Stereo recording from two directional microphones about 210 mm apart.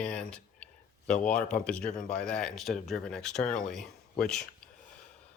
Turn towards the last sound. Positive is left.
turn(degrees=5)  # may be behind; listen again after turning